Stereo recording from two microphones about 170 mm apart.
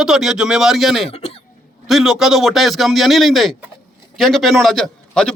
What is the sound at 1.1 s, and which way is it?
Hiccup, 35° left (ahead or behind).